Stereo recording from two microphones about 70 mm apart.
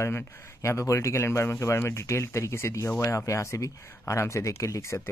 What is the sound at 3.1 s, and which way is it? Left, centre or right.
Speech, left.